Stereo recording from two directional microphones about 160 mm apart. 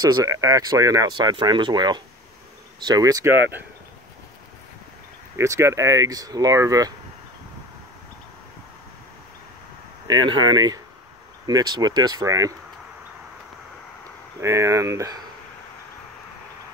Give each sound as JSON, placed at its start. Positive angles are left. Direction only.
{"t": 0.0, "sound": "speech", "side_deg": -20}
{"t": 5.3, "sound": "speech", "side_deg": -20}
{"t": 10.0, "sound": "speech", "side_deg": -25}
{"t": 14.4, "sound": "speech", "side_deg": -20}